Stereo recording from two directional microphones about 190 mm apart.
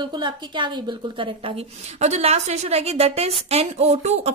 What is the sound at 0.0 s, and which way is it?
A woman's voice, 25° right (ahead or behind).